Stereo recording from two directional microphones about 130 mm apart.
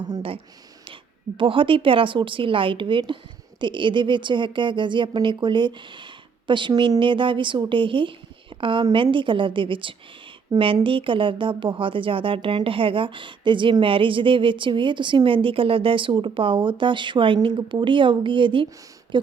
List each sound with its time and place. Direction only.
1.4 s speech: 40° right (ahead or behind)